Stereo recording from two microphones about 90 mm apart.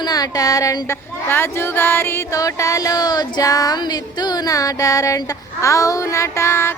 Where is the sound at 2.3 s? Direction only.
40° left (ahead or behind).